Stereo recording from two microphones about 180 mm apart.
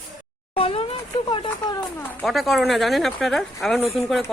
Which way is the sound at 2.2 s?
Centre (ahead or behind).